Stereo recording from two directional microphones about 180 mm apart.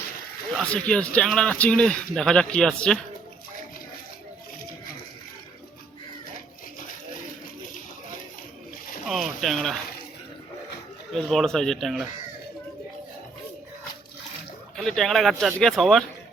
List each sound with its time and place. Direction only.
0.5 s speech: 5° left (ahead or behind)
9.0 s speech: centre (ahead or behind)
11.1 s speech: centre (ahead or behind)
14.8 s speech: centre (ahead or behind)